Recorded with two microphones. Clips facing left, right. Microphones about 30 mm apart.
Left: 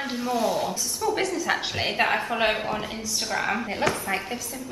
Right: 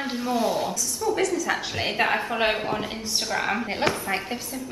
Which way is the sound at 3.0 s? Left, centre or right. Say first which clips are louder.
Right 2 dB; right.